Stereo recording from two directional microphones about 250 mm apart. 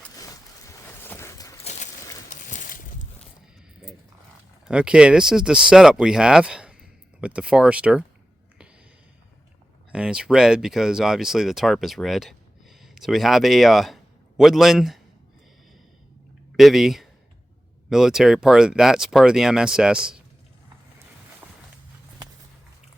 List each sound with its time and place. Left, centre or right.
0.1 s boat: centre
2.3 s a sound: left
4.6 s speech: centre
9.9 s speech: centre
16.6 s speech: centre